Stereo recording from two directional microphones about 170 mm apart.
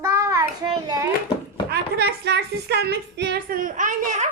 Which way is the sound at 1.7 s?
70° right (ahead or behind).